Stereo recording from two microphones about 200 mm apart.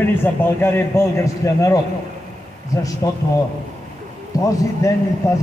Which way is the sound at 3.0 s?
20° left (ahead or behind).